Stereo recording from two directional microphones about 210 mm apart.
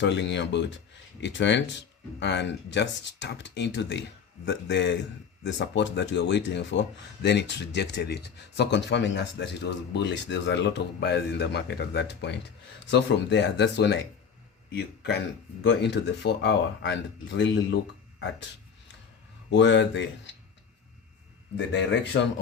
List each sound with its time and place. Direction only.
0.0 s speech: 55° left (ahead or behind)
19.5 s speech: 55° left (ahead or behind)
21.7 s speech: 55° left (ahead or behind)